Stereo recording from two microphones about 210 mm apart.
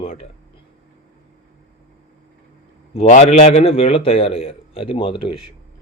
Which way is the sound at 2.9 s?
30° left (ahead or behind).